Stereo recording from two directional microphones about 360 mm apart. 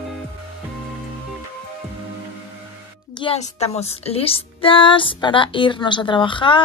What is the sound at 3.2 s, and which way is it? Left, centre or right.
Speech, centre.